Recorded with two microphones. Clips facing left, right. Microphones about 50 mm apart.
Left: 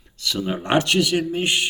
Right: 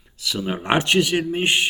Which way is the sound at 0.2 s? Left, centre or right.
Centre.